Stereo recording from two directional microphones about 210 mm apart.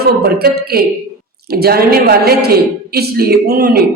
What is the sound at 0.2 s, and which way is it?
Speech, 50° right (ahead or behind).